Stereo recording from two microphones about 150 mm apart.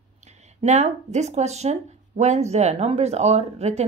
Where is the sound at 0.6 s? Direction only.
50° right (ahead or behind).